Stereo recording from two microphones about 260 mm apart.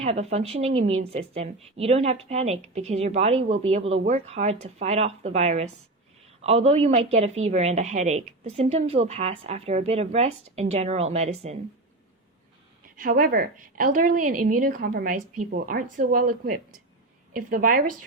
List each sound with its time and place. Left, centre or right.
0.0 s a woman's voice: right
13.0 s a woman's voice: right